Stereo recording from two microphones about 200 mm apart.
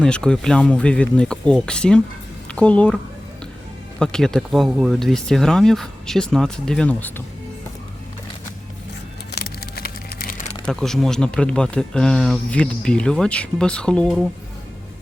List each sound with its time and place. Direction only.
0.0 s speech: 5° left (ahead or behind)
4.0 s speech: 5° left (ahead or behind)
9.3 s a sound: 50° left (ahead or behind)
10.7 s speech: 5° left (ahead or behind)